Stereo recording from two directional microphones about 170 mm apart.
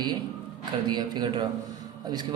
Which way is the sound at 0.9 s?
25° right (ahead or behind).